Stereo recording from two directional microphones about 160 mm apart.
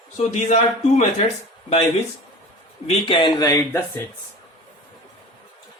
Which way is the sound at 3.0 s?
30° left (ahead or behind).